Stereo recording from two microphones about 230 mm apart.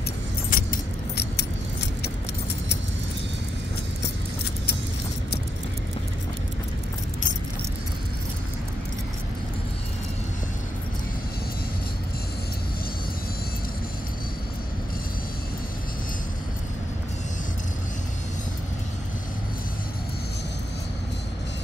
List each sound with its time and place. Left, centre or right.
0.5 s keys jangling: left